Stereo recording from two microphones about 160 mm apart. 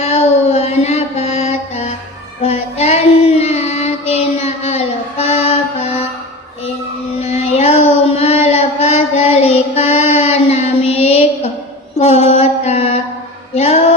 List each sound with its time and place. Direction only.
0.0 s mantra: 45° left (ahead or behind)
2.4 s child singing: 40° left (ahead or behind)
7.2 s child singing: 40° left (ahead or behind)
11.9 s mantra: 40° left (ahead or behind)
13.5 s female singing: 45° left (ahead or behind)